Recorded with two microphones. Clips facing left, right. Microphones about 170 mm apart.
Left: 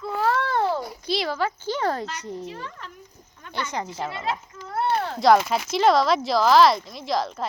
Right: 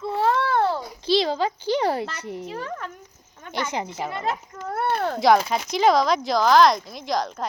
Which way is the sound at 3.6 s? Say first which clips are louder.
Right 2 dB; 15° right (ahead or behind).